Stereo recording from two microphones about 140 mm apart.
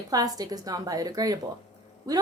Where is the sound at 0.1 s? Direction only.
25° right (ahead or behind).